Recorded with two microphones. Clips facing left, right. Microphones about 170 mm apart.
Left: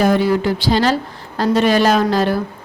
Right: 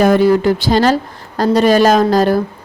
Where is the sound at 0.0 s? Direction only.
45° right (ahead or behind).